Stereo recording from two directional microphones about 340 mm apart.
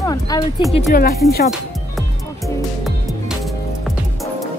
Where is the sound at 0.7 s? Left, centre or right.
Left.